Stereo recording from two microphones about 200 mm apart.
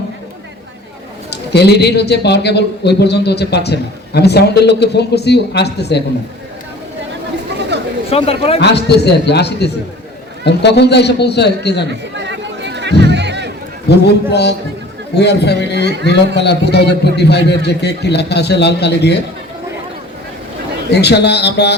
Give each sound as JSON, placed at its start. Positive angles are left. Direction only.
{"t": 1.3, "sound": "a man's voice", "side_deg": 55}
{"t": 7.7, "sound": "chatter", "side_deg": -55}
{"t": 8.1, "sound": "a man's voice", "side_deg": 30}
{"t": 8.6, "sound": "a man's voice", "side_deg": 55}
{"t": 11.9, "sound": "chatter", "side_deg": -60}
{"t": 13.8, "sound": "a man's voice", "side_deg": 55}
{"t": 20.9, "sound": "a man's voice", "side_deg": 55}